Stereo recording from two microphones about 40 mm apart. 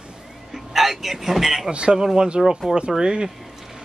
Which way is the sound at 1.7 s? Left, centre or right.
Right.